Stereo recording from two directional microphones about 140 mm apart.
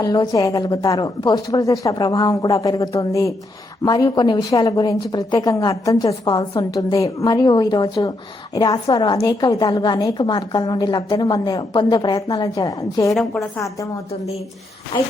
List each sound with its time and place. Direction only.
0.0 s a woman's voice: 25° left (ahead or behind)
13.1 s a woman's voice: centre (ahead or behind)